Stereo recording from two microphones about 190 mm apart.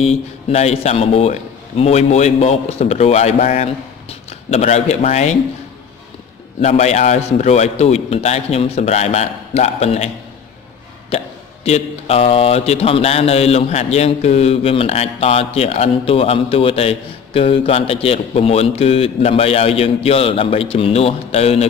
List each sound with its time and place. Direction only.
0.0 s speech: 35° left (ahead or behind)
6.6 s speech: 35° left (ahead or behind)